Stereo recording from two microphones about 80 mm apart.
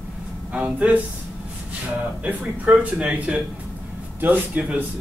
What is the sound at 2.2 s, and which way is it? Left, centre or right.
Speech, centre.